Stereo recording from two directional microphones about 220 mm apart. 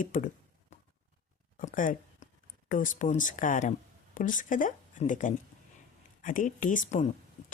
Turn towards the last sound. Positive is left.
turn(degrees=35)  # may be behind; listen again after turning